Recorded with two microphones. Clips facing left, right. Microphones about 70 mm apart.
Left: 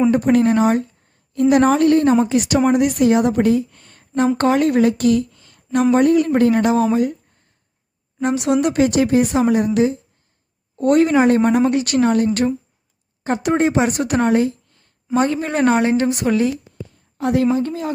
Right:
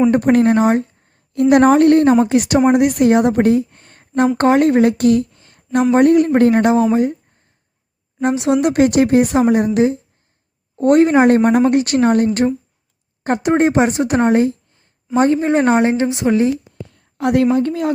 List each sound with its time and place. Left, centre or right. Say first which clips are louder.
0.1 s a woman's voice: right 2 dB; right
8.2 s a woman's voice: right 2 dB; right
16.9 s a sound: right 3 dB; right
17.4 s a woman's voice: right 3 dB; right